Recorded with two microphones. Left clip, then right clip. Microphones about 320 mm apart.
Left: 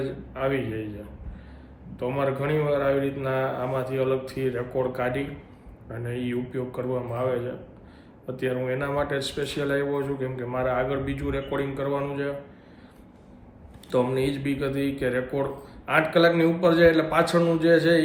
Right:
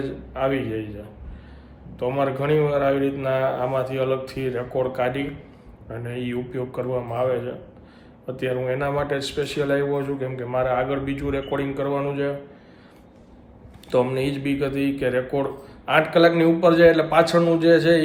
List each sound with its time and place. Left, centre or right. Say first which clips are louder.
0.0 s a man's voice: right 3 dB; centre
2.0 s a man's voice: right 3 dB; centre
13.9 s a man's voice: right 3 dB; centre